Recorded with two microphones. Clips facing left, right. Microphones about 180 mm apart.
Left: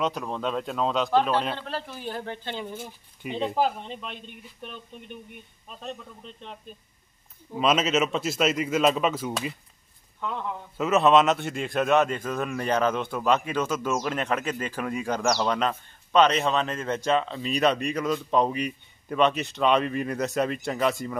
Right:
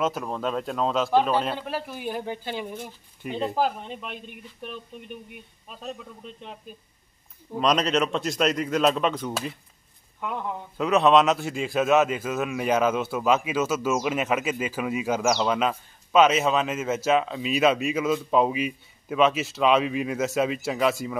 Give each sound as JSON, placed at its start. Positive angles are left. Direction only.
{"t": 0.0, "sound": "speech", "side_deg": 0}
{"t": 2.7, "sound": "speech", "side_deg": 0}
{"t": 7.5, "sound": "speech", "side_deg": 5}
{"t": 10.8, "sound": "speech", "side_deg": 0}